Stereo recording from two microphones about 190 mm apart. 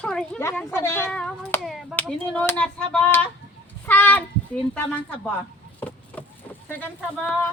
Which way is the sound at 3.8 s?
10° left (ahead or behind).